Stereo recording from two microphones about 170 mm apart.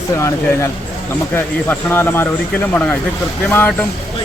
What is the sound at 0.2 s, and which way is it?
A man's voice, 15° left (ahead or behind).